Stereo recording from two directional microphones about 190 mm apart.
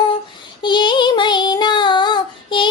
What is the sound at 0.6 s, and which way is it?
Child singing, 25° left (ahead or behind).